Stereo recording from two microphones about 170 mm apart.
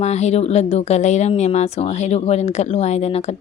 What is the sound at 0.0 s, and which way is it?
Speech, 40° left (ahead or behind).